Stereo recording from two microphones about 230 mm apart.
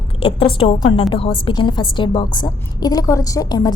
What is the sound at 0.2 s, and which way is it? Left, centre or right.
A woman's voice, left.